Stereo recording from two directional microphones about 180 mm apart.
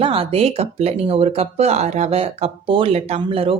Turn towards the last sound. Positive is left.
turn(degrees=-30)  # may be behind; listen again after turning